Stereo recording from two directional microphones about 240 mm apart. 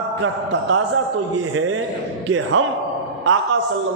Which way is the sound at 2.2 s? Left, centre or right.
Right.